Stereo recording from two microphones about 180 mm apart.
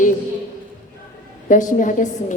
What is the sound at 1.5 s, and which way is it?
Speech, 45° left (ahead or behind).